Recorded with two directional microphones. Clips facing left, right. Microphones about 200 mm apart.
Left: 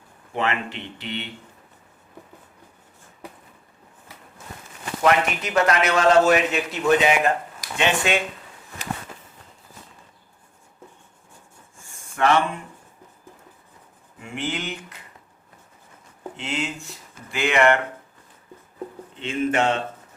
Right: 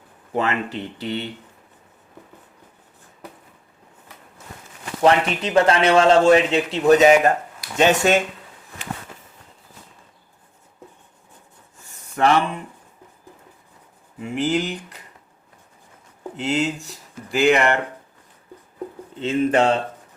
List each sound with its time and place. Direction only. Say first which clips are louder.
0.3 s speech: right 3 dB; 40° right (ahead or behind)
5.0 s a man's voice: right 3 dB; 30° right (ahead or behind)
12.2 s speech: right 2 dB; 35° right (ahead or behind)
14.3 s speech: right 7 dB; 35° right (ahead or behind)
16.4 s speech: right 7 dB; 35° right (ahead or behind)
19.2 s speech: right 4 dB; 35° right (ahead or behind)